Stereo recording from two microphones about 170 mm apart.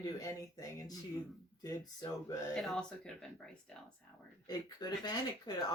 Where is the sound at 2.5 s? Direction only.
Centre (ahead or behind).